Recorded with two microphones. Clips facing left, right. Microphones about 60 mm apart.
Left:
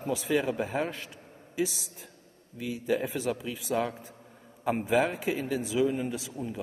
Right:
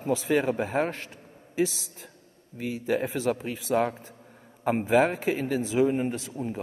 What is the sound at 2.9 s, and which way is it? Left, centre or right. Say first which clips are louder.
A man's voice: right 3 dB; right.